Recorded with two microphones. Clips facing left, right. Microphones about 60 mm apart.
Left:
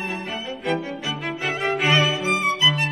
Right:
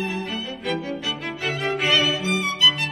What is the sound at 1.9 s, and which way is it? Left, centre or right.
Music, left.